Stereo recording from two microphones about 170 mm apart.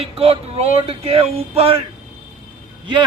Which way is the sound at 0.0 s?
35° right (ahead or behind).